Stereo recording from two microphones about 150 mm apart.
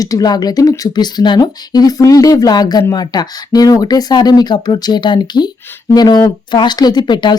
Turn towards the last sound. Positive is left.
turn(degrees=30)  # may be behind; listen again after turning